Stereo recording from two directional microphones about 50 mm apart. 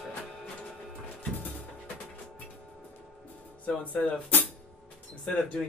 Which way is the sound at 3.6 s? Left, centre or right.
Left.